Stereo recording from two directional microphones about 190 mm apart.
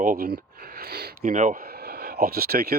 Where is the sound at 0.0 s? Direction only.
50° right (ahead or behind).